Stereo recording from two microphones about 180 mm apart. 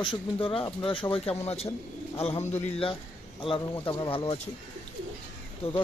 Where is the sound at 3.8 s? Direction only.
25° left (ahead or behind).